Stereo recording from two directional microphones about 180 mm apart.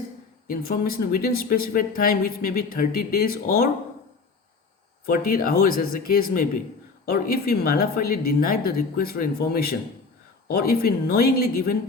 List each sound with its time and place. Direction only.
0.4 s speech: 55° left (ahead or behind)
5.0 s speech: 55° left (ahead or behind)